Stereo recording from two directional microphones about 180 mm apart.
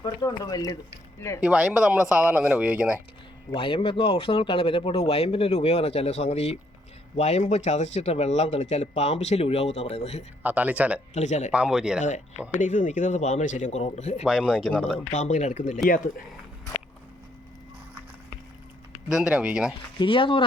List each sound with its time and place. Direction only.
0.0 s speech: 20° left (ahead or behind)
1.4 s speech: 5° right (ahead or behind)
3.5 s speech: 30° left (ahead or behind)
10.4 s speech: 10° right (ahead or behind)
11.1 s speech: 40° left (ahead or behind)
11.5 s speech: 5° right (ahead or behind)
12.5 s speech: 45° left (ahead or behind)
14.3 s speech: centre (ahead or behind)
15.1 s speech: 40° left (ahead or behind)
19.0 s speech: 5° right (ahead or behind)
20.0 s speech: 30° left (ahead or behind)